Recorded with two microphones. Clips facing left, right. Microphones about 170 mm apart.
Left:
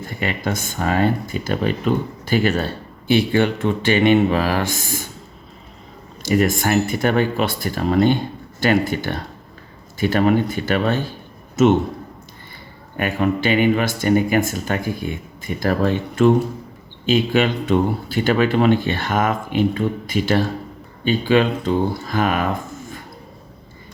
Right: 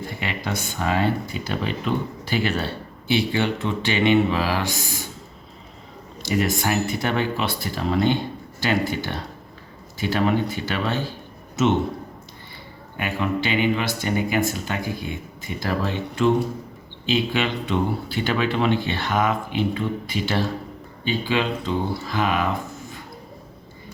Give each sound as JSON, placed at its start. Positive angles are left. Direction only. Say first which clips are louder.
{"t": 0.0, "sound": "speech", "louder": "left 5 dB", "side_deg": 45}
{"t": 6.2, "sound": "speech", "louder": "left 5 dB", "side_deg": 50}
{"t": 13.0, "sound": "speech", "louder": "left 5 dB", "side_deg": 50}